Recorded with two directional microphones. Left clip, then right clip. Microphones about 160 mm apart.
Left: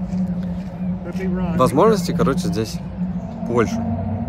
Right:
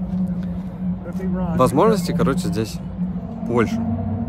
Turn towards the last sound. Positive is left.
turn(degrees=-10)  # may be behind; listen again after turning